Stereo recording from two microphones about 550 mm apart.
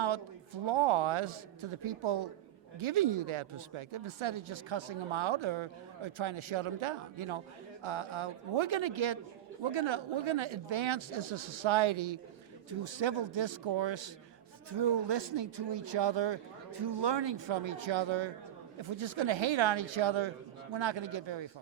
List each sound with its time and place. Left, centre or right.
0.0 s speech: right